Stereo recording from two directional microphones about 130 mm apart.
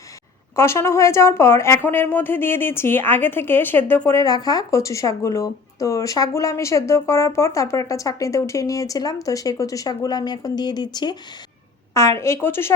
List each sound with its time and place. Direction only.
0.5 s speech: 20° left (ahead or behind)
12.2 s speech: 20° left (ahead or behind)